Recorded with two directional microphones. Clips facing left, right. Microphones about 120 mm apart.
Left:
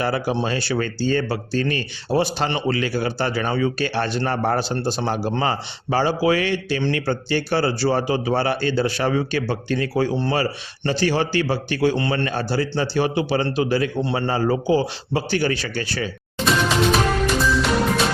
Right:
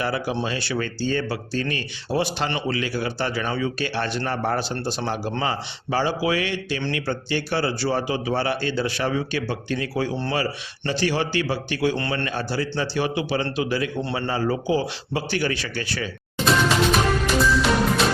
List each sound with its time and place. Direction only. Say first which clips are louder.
0.0 s speech: left 3 dB; 40° left (ahead or behind)
16.5 s music: left 1 dB; centre (ahead or behind)